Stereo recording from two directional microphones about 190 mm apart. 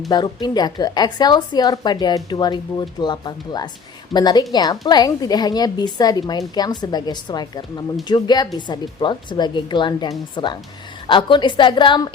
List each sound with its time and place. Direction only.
0.1 s a woman's voice: 25° left (ahead or behind)